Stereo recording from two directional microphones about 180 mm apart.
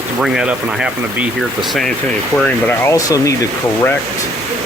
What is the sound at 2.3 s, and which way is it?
Speech, 10° left (ahead or behind).